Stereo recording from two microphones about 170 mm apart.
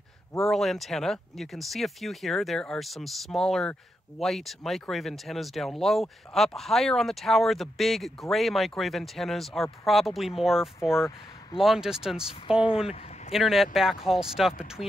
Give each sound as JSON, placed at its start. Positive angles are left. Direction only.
{"t": 0.4, "sound": "speech", "side_deg": 0}
{"t": 10.8, "sound": "speech", "side_deg": 15}
{"t": 11.5, "sound": "speech", "side_deg": 0}